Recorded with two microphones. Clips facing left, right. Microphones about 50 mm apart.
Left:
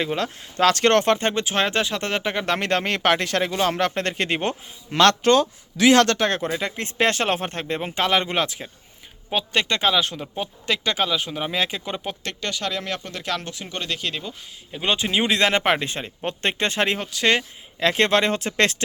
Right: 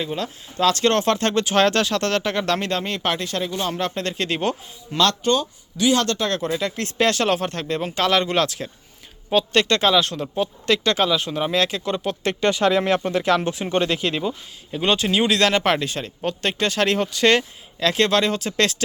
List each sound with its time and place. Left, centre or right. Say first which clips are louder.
0.0 s speech: left 2 dB; left
1.1 s speech: right 2 dB; centre
2.6 s speech: left 2 dB; left
4.9 s speech: left 3 dB; left
5.2 s speech: left 3 dB; left
6.1 s speech: left 2 dB; left
6.3 s speech: right 2 dB; left
12.2 s speech: right 13 dB; centre
13.1 s speech: right 9 dB; centre
13.5 s speech: right 9 dB; right
14.0 s speech: right 6 dB; centre
14.7 s speech: right 3 dB; centre
17.0 s speech: right 3 dB; centre
17.7 s speech: even; left